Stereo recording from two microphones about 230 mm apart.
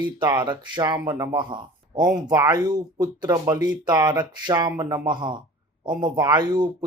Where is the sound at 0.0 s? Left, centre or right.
Centre.